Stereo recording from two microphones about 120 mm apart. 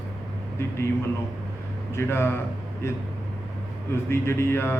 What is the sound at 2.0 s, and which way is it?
Speech, 20° left (ahead or behind).